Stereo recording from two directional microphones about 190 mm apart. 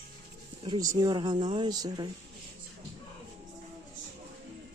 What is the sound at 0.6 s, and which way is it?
Speech, 20° right (ahead or behind).